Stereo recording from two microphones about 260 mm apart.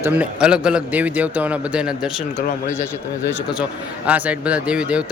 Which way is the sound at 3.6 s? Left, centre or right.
Centre.